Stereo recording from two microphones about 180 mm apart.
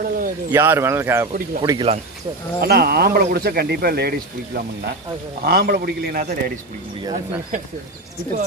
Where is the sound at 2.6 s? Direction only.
60° right (ahead or behind).